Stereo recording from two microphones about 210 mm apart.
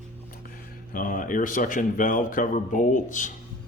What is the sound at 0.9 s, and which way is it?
Speech, 40° left (ahead or behind).